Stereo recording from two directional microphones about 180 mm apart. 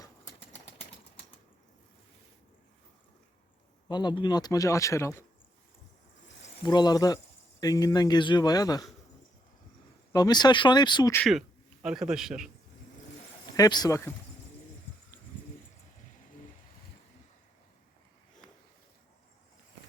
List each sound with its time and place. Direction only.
3.8 s speech: 25° left (ahead or behind)
6.6 s speech: 25° left (ahead or behind)
10.1 s speech: 20° left (ahead or behind)
11.3 s speech: centre (ahead or behind)
13.6 s speech: 20° left (ahead or behind)